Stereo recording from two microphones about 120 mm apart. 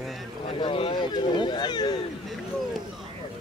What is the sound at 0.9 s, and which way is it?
Speech, 35° left (ahead or behind).